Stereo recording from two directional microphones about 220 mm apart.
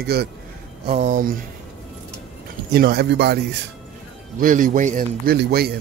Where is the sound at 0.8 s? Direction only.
30° right (ahead or behind).